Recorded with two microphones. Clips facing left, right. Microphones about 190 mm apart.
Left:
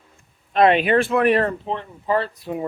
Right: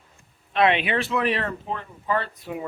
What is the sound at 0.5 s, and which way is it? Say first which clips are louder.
Speech: left 5 dB; 40° left (ahead or behind).